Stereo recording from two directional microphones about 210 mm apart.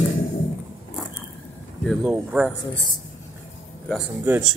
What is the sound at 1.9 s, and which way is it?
Speech, 5° right (ahead or behind).